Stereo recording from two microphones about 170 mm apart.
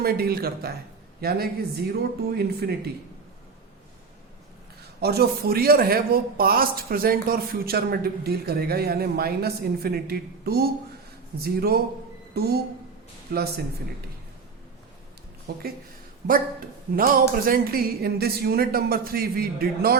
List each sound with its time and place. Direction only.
0.0 s speech: 65° right (ahead or behind)
4.9 s speech: 70° right (ahead or behind)
15.5 s speech: 65° right (ahead or behind)